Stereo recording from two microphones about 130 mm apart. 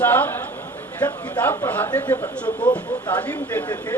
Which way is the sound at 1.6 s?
15° left (ahead or behind).